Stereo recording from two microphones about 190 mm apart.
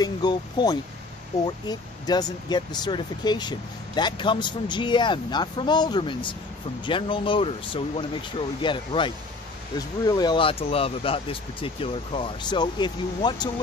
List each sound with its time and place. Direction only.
0.0 s speech: 20° left (ahead or behind)